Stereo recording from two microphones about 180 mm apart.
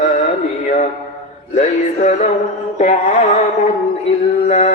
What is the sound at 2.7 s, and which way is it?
Speech, 40° left (ahead or behind).